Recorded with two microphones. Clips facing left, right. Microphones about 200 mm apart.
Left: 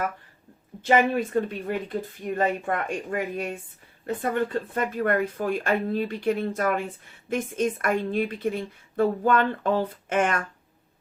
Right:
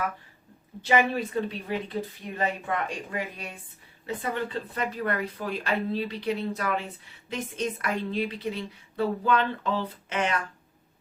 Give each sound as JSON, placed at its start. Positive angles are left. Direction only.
{"t": 0.8, "sound": "speech", "side_deg": 50}